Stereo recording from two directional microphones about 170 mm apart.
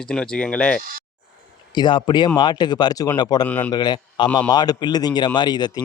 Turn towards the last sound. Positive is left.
turn(degrees=25)  # may be behind; listen again after turning